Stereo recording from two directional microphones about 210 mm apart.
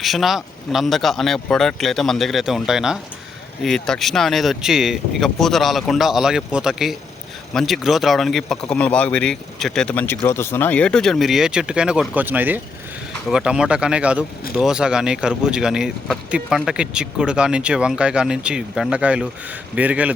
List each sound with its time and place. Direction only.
0.0 s speech: centre (ahead or behind)